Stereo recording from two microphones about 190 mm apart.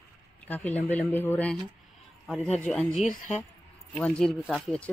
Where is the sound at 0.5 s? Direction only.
10° left (ahead or behind).